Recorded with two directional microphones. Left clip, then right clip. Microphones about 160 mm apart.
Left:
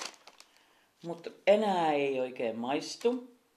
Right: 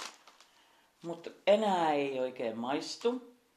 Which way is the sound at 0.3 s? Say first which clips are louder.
Left 4 dB; 50° left (ahead or behind).